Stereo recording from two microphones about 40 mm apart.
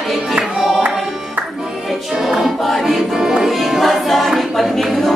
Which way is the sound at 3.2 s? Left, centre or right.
Centre.